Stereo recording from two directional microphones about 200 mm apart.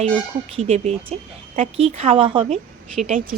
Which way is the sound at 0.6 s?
30° right (ahead or behind).